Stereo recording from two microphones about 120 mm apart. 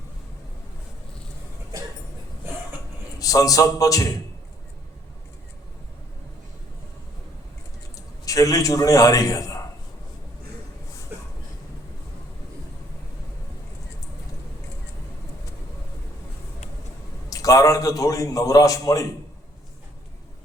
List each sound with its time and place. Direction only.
3.2 s a man's voice: 30° left (ahead or behind)
7.9 s a man's voice: 30° left (ahead or behind)
11.1 s train: 15° right (ahead or behind)
17.2 s a man's voice: 30° left (ahead or behind)